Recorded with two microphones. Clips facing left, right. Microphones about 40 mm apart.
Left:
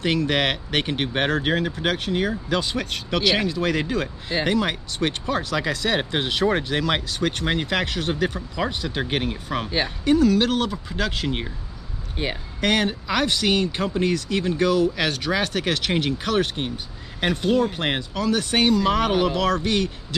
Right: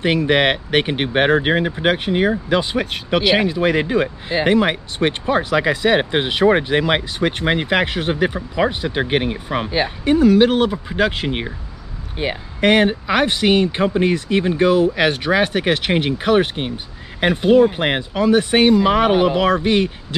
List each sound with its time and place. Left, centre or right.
0.0 s speech: right
10.0 s speech: right
12.2 s speech: centre
12.5 s speech: right